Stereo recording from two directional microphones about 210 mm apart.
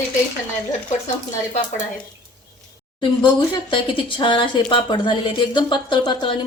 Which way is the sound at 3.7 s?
25° left (ahead or behind).